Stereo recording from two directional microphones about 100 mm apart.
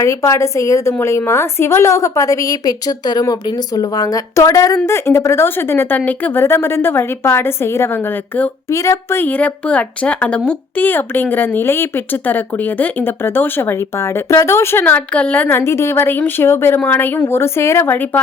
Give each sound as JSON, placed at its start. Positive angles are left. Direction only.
{"t": 0.0, "sound": "a woman's voice", "side_deg": 30}